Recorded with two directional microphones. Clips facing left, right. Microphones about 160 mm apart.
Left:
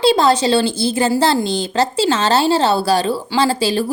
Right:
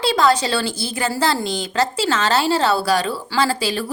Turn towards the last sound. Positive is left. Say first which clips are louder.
# left 4 dB
turn(degrees=30)  # may be behind; listen again after turning